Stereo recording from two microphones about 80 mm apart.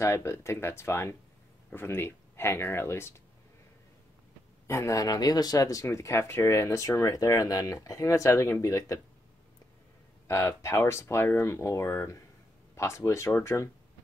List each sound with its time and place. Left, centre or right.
0.0 s speech: left
4.6 s speech: left
10.2 s speech: left